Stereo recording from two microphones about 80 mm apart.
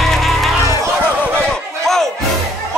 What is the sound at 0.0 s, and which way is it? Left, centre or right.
Music, centre.